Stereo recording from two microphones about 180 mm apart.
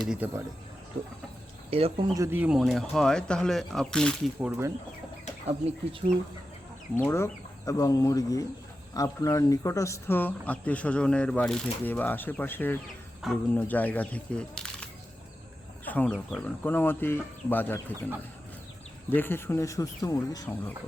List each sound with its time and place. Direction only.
0.0 s speech: 5° right (ahead or behind)
1.7 s speech: 30° right (ahead or behind)
2.1 s speech: 15° right (ahead or behind); by 4.1 s 5° left (ahead or behind)
4.4 s speech: 10° right (ahead or behind)
5.5 s speech: 35° right (ahead or behind)
6.9 s speech: 15° left (ahead or behind)
19.1 s speech: 10° left (ahead or behind)